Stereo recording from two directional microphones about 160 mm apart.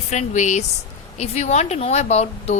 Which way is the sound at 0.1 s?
45° left (ahead or behind).